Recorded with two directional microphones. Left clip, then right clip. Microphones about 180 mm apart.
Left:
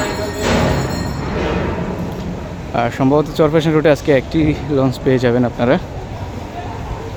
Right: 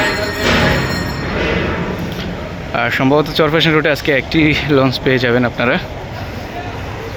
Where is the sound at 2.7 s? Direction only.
15° left (ahead or behind).